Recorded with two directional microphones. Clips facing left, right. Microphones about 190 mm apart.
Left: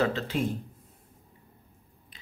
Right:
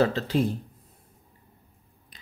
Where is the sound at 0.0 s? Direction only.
35° right (ahead or behind).